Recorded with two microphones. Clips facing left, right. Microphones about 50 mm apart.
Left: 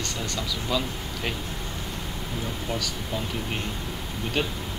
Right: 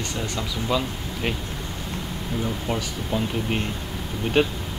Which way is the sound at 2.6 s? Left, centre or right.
Right.